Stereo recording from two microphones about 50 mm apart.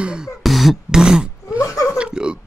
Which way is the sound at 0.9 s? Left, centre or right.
Centre.